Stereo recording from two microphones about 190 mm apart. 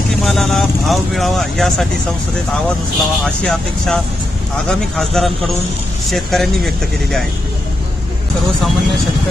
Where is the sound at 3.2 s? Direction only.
5° left (ahead or behind).